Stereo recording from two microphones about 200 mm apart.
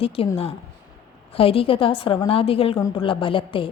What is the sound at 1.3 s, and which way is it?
A woman's voice, 30° left (ahead or behind).